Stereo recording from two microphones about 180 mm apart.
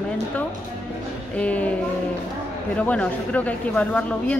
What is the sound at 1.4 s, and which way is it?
Speech, 5° left (ahead or behind).